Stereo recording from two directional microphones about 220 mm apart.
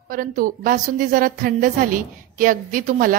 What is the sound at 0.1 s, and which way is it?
A woman's voice, 40° right (ahead or behind).